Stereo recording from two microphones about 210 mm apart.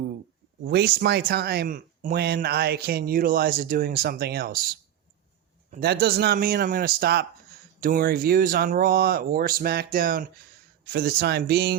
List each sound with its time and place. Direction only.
0.6 s speech: 45° right (ahead or behind)